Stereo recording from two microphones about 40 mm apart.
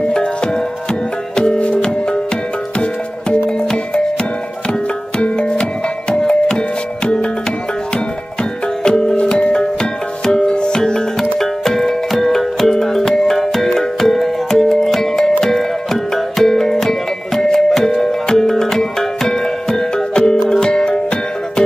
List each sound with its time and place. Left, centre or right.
0.0 s music: left
8.8 s music: left